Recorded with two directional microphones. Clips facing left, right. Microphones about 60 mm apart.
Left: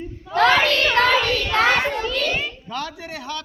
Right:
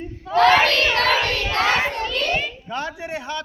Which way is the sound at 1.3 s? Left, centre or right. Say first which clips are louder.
Left 2 dB; centre.